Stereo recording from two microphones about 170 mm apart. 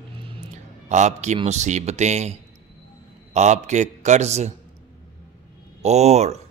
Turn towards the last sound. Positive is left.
turn(degrees=-40)  # may be behind; listen again after turning